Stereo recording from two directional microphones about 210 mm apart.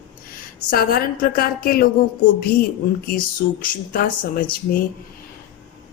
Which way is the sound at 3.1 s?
45° left (ahead or behind).